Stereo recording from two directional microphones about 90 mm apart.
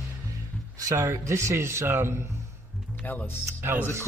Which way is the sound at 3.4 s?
30° right (ahead or behind).